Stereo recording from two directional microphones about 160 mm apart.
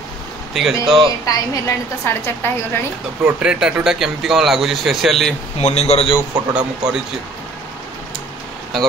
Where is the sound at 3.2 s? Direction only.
5° right (ahead or behind).